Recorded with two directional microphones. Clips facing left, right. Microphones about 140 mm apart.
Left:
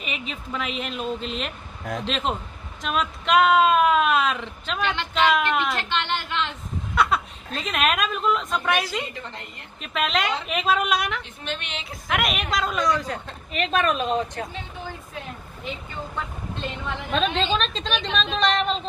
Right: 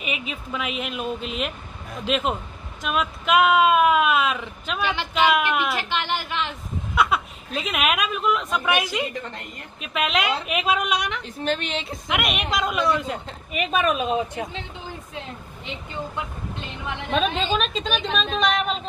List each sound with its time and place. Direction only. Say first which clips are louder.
0.0 s a woman's voice: right 2 dB; 5° right (ahead or behind)
11.4 s a woman's voice: right 12 dB; 35° right (ahead or behind)
12.1 s a woman's voice: even; centre (ahead or behind)
15.1 s speech: right 1 dB; 20° right (ahead or behind)
17.1 s a woman's voice: right 1 dB; 5° right (ahead or behind)